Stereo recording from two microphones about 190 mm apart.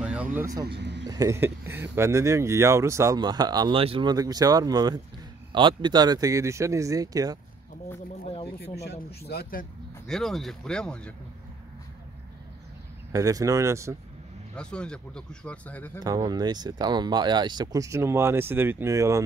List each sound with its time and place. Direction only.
0.0 s a sound: 5° right (ahead or behind)
0.7 s speech: 65° right (ahead or behind)
1.1 s speech: 15° right (ahead or behind)
8.3 s speech: 30° left (ahead or behind)
8.7 s speech: 60° left (ahead or behind)
10.0 s speech: centre (ahead or behind)
13.1 s speech: 20° right (ahead or behind)
14.5 s speech: 5° left (ahead or behind)
16.0 s speech: 20° right (ahead or behind)